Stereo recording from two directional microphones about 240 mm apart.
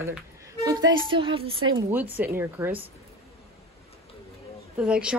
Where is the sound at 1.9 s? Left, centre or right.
Centre.